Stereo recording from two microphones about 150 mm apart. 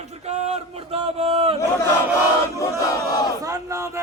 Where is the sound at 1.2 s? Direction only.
40° right (ahead or behind).